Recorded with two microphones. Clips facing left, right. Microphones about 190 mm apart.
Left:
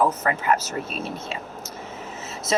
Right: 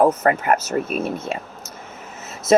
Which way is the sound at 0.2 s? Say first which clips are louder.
Right 4 dB; 50° right (ahead or behind).